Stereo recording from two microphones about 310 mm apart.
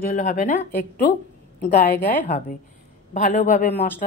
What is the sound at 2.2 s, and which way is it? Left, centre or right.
A woman's voice, left.